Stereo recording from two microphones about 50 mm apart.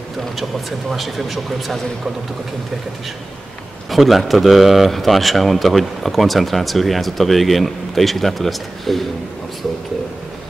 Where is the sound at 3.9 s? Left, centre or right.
Centre.